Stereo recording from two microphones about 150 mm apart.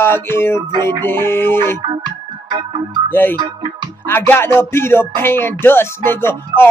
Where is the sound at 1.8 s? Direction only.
30° right (ahead or behind).